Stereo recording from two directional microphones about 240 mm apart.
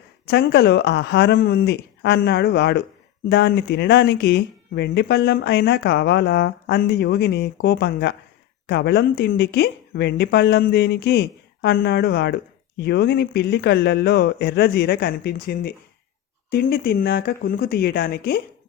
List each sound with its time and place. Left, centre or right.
0.3 s speech: left